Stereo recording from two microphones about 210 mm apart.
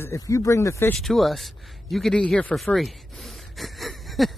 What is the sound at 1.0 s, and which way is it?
Speech, centre (ahead or behind).